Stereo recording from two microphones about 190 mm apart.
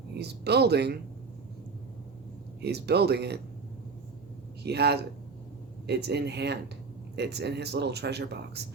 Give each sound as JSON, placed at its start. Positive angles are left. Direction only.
{"t": 0.2, "sound": "speech", "side_deg": -60}
{"t": 2.6, "sound": "speech", "side_deg": -60}
{"t": 4.6, "sound": "speech", "side_deg": -60}